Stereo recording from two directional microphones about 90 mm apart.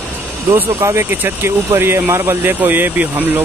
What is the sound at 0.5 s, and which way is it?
Speech, 25° right (ahead or behind).